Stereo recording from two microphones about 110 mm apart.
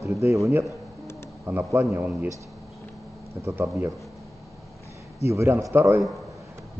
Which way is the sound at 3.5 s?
20° right (ahead or behind).